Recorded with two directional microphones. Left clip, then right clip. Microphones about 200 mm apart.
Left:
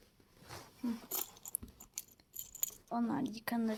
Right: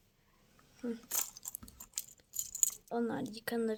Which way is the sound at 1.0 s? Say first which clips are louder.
Right 4 dB; 15° right (ahead or behind).